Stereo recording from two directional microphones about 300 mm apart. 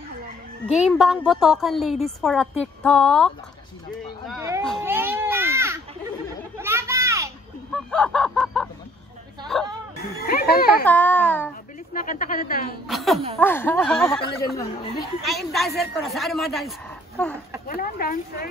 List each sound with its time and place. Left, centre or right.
0.8 s a woman's voice: centre
4.4 s speech: centre
4.6 s baby cry: centre
6.6 s children playing: centre
7.7 s a sound: centre
10.2 s a child's voice: left
10.9 s a woman's voice: centre
11.9 s speech: left
12.8 s a woman's voice: centre
17.6 s speech: left